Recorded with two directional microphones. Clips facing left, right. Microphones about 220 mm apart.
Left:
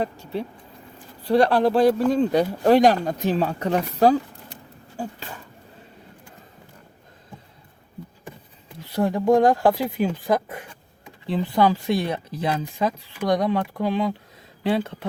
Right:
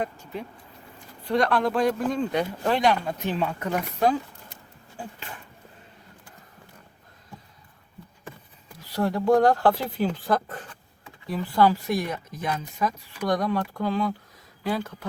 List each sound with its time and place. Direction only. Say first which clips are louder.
1.2 s a man's voice: left 5 dB; 35° left (ahead or behind)
9.0 s speech: left 2 dB; 20° left (ahead or behind)
11.3 s speech: left 2 dB; 25° left (ahead or behind)